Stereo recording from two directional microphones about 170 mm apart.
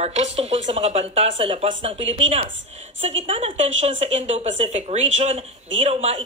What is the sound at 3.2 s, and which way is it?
Speech, 35° right (ahead or behind).